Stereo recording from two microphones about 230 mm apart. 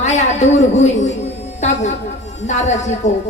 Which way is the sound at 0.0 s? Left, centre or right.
Left.